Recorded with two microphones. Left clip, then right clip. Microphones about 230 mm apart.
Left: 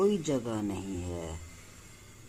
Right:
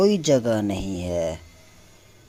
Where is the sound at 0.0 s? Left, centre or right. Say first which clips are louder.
Right 10 dB; right.